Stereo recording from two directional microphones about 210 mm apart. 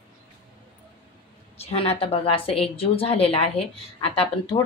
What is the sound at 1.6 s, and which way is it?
A woman's voice, 30° left (ahead or behind).